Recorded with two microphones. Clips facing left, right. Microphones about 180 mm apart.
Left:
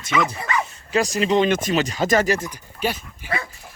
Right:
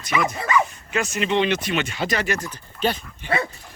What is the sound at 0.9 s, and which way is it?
Speech, 35° left (ahead or behind).